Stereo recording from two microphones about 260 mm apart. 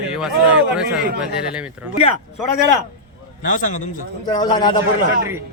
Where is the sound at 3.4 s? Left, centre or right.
Left.